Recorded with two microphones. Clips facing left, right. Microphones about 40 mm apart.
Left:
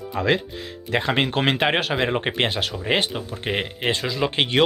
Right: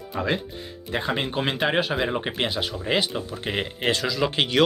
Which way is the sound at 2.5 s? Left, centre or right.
Left.